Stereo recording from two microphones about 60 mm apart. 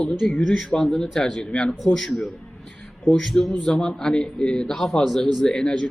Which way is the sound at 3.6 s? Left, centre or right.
Centre.